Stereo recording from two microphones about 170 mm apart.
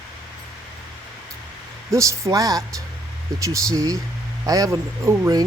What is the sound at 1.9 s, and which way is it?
Speech, 15° right (ahead or behind).